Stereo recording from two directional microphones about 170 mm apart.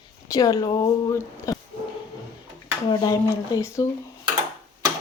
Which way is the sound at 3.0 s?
20° left (ahead or behind).